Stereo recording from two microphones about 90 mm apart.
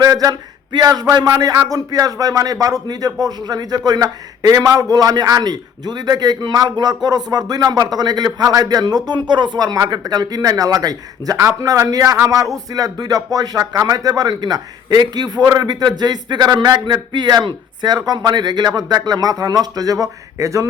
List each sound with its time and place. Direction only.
0.0 s speech: 45° right (ahead or behind)
15.6 s speech: 55° right (ahead or behind); by 20.7 s 35° right (ahead or behind)